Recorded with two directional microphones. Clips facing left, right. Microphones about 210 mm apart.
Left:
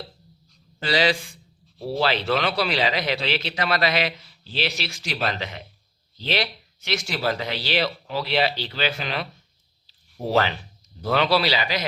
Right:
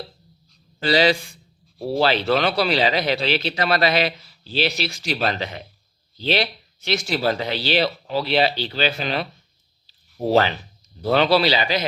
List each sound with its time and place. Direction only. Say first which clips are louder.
0.9 s speech: right 4 dB; 35° right (ahead or behind)
11.1 s a man's voice: right 4 dB; 30° right (ahead or behind)